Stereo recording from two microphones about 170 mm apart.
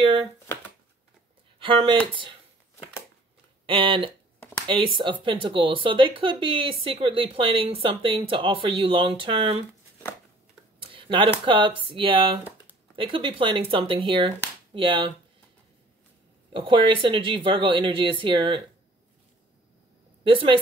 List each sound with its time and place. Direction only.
1.6 s speech: 30° right (ahead or behind)
3.6 s speech: 30° right (ahead or behind)
10.8 s a sound: 30° right (ahead or behind)
11.4 s speech: 30° right (ahead or behind)
16.5 s speech: 30° right (ahead or behind)
20.2 s speech: 30° right (ahead or behind)